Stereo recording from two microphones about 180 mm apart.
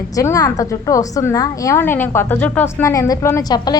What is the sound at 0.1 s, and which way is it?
A woman's voice, 20° left (ahead or behind).